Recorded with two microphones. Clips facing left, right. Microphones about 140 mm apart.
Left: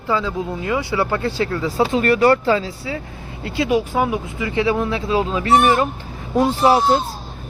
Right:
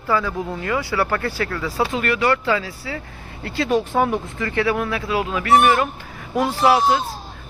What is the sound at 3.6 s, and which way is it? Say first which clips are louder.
Speech: even; 5° left (ahead or behind).